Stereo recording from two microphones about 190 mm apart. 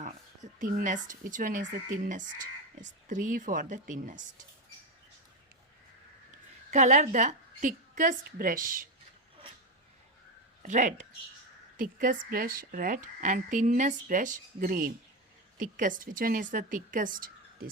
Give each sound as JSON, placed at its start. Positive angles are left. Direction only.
{"t": 0.6, "sound": "speech", "side_deg": -45}
{"t": 6.7, "sound": "speech", "side_deg": -40}
{"t": 10.6, "sound": "speech", "side_deg": -40}